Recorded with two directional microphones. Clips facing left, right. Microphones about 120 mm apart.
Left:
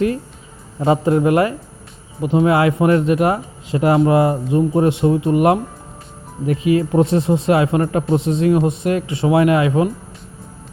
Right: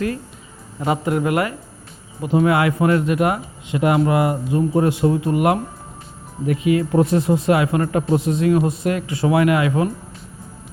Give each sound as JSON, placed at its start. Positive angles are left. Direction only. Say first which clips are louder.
{"t": 0.8, "sound": "a man's voice", "louder": "left 5 dB", "side_deg": 30}